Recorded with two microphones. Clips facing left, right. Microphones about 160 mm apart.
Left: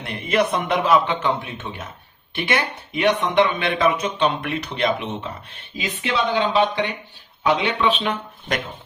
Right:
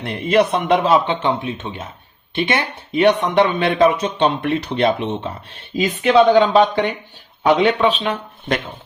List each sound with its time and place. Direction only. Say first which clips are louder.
0.0 s speech: right 5 dB; 30° right (ahead or behind)
5.7 s speech: right 11 dB; 45° right (ahead or behind)